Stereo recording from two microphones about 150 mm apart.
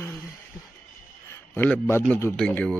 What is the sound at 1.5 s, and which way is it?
Speech, 10° left (ahead or behind).